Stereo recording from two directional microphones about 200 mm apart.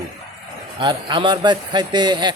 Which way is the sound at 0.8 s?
25° right (ahead or behind).